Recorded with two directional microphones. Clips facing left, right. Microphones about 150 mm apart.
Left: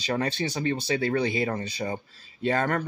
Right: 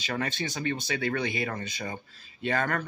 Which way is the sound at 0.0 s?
35° left (ahead or behind).